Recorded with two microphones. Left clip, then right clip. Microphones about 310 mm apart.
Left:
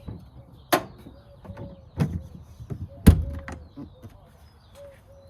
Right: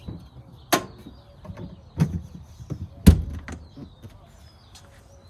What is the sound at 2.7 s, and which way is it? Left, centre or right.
Thunk, centre.